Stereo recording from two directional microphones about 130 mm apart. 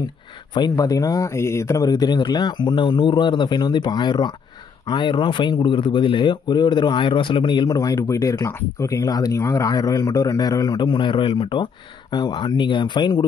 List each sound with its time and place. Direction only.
0.6 s speech: 30° left (ahead or behind)